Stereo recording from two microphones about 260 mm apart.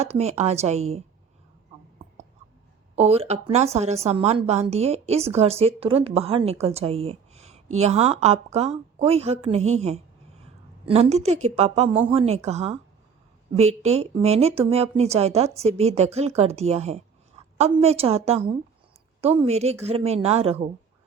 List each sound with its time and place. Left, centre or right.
0.0 s a woman's voice: right
2.9 s a woman's voice: right